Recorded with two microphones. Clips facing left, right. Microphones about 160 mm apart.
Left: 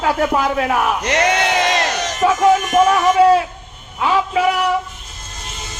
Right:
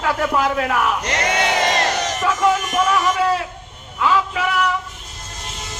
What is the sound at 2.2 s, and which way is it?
Speech, 55° left (ahead or behind).